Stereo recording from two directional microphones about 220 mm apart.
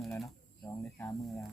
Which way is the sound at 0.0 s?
Centre (ahead or behind).